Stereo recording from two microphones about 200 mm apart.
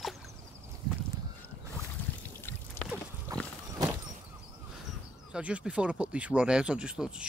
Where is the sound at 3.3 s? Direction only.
15° right (ahead or behind).